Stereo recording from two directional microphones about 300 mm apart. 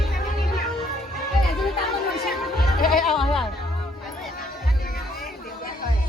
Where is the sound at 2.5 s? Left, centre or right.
Left.